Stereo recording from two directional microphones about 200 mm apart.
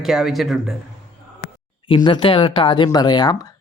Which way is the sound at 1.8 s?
25° left (ahead or behind).